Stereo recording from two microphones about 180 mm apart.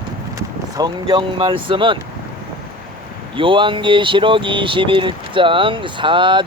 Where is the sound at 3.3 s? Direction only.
30° right (ahead or behind).